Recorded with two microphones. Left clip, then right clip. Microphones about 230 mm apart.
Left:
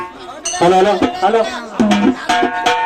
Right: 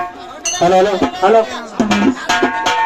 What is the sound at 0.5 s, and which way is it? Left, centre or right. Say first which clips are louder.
Speech: left 1 dB; left.